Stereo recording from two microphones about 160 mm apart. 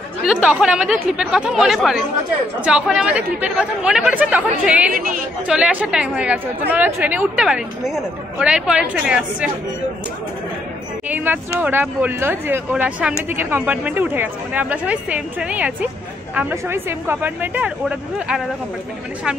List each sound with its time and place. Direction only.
0.2 s a woman's voice: 5° right (ahead or behind)
4.9 s a woman's voice: 60° right (ahead or behind)
5.5 s a woman's voice: 10° right (ahead or behind)
11.1 s a woman's voice: 10° right (ahead or behind)